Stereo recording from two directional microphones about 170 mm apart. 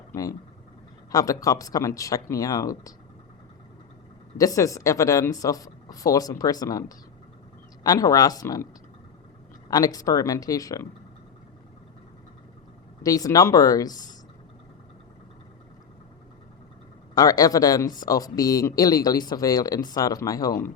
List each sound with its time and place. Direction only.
0.1 s speech: 20° left (ahead or behind)
4.4 s speech: 20° left (ahead or behind)
9.6 s speech: 20° left (ahead or behind)
13.0 s speech: 20° left (ahead or behind)
17.2 s speech: 20° left (ahead or behind)